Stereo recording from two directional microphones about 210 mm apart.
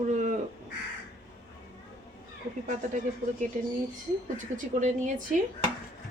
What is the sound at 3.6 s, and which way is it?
Speech, 35° right (ahead or behind).